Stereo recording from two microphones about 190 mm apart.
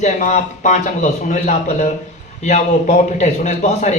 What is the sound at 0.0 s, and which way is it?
A man's voice, 40° left (ahead or behind).